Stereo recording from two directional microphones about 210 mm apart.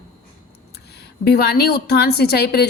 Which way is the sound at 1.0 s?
50° left (ahead or behind).